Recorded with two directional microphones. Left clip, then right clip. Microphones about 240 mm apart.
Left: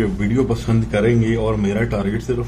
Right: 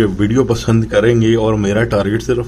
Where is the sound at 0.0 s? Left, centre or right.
Right.